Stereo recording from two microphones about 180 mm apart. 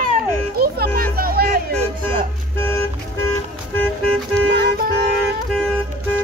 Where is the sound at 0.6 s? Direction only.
55° right (ahead or behind).